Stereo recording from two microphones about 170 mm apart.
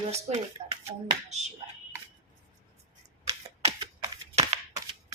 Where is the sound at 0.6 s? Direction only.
40° right (ahead or behind).